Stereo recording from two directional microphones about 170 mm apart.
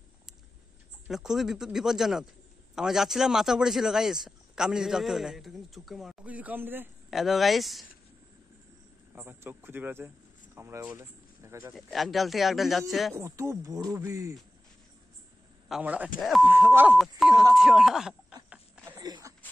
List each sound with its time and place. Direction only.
1.0 s a man's voice: centre (ahead or behind)
9.1 s speech: 15° right (ahead or behind)
11.7 s a man's voice: centre (ahead or behind)
13.1 s speech: 15° right (ahead or behind)
15.7 s a man's voice: 10° right (ahead or behind)
16.4 s a man's voice: 10° right (ahead or behind)
18.9 s a sound: 25° right (ahead or behind)